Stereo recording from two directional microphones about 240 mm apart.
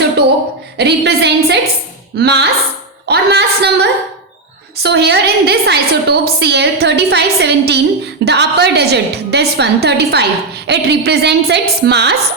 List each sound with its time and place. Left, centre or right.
0.8 s a woman's voice: right